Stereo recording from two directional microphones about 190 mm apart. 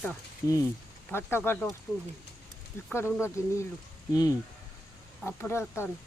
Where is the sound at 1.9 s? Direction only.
Centre (ahead or behind).